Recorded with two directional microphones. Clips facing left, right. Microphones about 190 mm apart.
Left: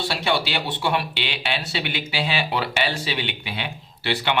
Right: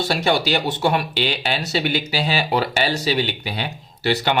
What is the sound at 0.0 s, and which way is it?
Speech, 45° right (ahead or behind).